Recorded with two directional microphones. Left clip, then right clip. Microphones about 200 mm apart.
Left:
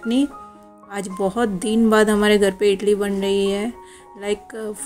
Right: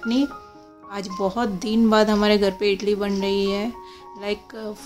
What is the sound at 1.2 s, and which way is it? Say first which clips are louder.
Speech: left 3 dB; 10° left (ahead or behind).